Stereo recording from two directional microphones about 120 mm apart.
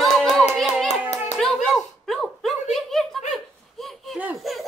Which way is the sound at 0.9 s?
70° left (ahead or behind).